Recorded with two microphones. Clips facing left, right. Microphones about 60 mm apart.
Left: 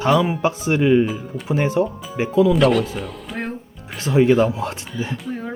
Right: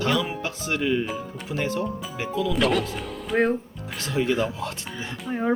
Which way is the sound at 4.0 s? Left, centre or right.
Left.